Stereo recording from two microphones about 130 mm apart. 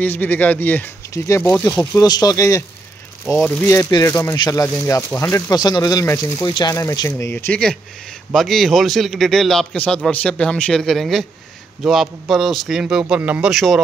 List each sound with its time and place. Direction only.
0.0 s speech: 15° left (ahead or behind)
3.3 s a man's voice: centre (ahead or behind)
3.6 s speech: 25° left (ahead or behind)
5.5 s speech: 30° left (ahead or behind)
7.1 s speech: 15° left (ahead or behind)
8.3 s a man's voice: centre (ahead or behind)